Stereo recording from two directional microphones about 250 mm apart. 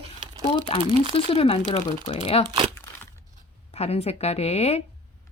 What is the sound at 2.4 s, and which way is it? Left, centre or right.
Speech, centre.